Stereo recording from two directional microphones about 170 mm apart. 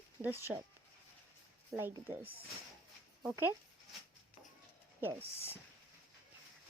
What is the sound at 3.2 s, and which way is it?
Speech, 15° right (ahead or behind).